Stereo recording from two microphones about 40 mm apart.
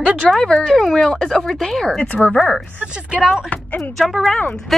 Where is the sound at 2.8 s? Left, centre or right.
Right.